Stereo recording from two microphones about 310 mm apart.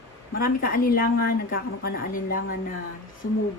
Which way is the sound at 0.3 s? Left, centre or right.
Left.